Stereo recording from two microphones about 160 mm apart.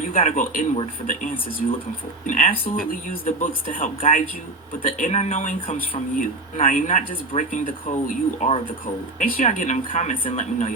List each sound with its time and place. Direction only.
0.1 s speech: 55° left (ahead or behind)
5.5 s speech: 35° left (ahead or behind)
6.1 s speech: 55° left (ahead or behind)